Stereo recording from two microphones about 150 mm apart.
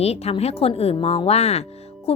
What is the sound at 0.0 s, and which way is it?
A woman's voice, 45° left (ahead or behind).